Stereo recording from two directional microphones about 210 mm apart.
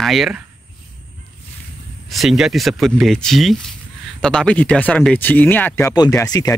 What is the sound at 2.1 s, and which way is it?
Speech, centre (ahead or behind).